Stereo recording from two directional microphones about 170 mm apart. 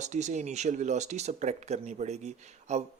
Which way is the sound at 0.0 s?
45° right (ahead or behind).